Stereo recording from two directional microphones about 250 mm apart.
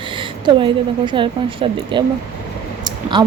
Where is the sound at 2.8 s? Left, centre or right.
Centre.